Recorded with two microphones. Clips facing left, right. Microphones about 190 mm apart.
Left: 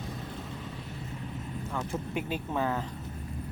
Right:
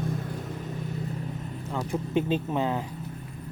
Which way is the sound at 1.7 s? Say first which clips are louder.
Right 7 dB; 15° right (ahead or behind).